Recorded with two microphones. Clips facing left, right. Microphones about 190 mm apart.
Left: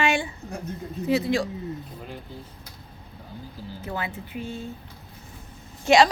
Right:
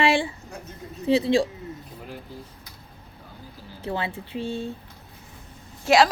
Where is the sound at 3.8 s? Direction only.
30° right (ahead or behind).